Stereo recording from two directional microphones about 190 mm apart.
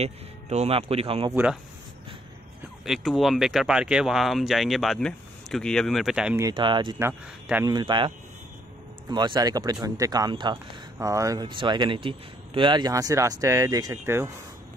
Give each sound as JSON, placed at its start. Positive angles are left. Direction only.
{"t": 0.0, "sound": "speech", "side_deg": -35}
{"t": 1.3, "sound": "speech", "side_deg": -10}
{"t": 2.8, "sound": "speech", "side_deg": 0}
{"t": 6.4, "sound": "speech", "side_deg": -25}
{"t": 7.0, "sound": "speech", "side_deg": -10}
{"t": 7.6, "sound": "speech", "side_deg": -25}
{"t": 9.1, "sound": "speech", "side_deg": -25}